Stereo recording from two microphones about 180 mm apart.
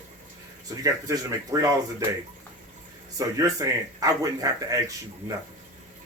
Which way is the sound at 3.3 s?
20° right (ahead or behind).